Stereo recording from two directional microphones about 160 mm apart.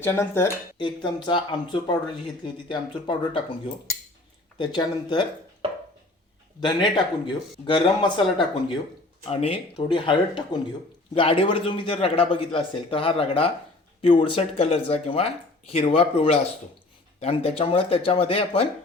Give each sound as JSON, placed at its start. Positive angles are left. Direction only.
{"t": 0.0, "sound": "speech", "side_deg": 15}
{"t": 0.8, "sound": "speech", "side_deg": 30}
{"t": 4.5, "sound": "speech", "side_deg": 30}
{"t": 6.6, "sound": "speech", "side_deg": 30}